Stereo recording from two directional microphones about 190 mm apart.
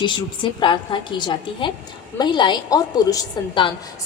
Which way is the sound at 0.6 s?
25° left (ahead or behind).